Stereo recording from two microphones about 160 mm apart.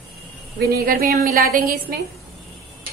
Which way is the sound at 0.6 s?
70° right (ahead or behind).